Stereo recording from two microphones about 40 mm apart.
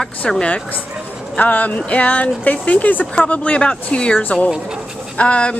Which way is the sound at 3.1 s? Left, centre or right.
Left.